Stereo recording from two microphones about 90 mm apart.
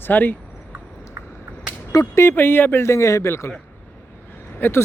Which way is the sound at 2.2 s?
25° left (ahead or behind).